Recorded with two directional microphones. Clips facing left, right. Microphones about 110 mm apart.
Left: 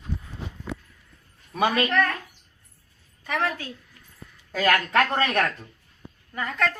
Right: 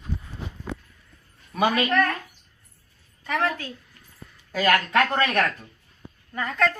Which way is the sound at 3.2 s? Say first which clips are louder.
Right 2 dB; 10° left (ahead or behind).